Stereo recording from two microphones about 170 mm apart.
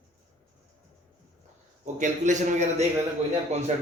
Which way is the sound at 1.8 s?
45° right (ahead or behind).